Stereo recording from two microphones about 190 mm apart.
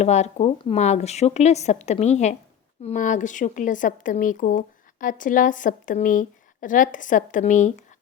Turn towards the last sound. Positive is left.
turn(degrees=40)  # may be behind; listen again after turning